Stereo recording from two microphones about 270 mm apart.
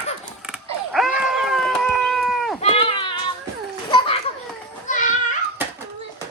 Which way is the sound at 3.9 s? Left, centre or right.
Centre.